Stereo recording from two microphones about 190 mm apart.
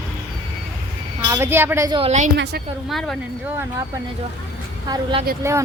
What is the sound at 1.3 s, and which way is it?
Speech, 10° right (ahead or behind).